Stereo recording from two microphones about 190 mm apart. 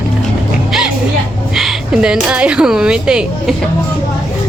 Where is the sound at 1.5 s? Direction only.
Centre (ahead or behind).